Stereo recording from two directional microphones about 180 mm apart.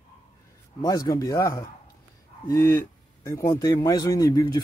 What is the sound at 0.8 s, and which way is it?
Speech, 20° left (ahead or behind).